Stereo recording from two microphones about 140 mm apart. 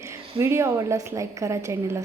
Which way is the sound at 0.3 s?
20° right (ahead or behind).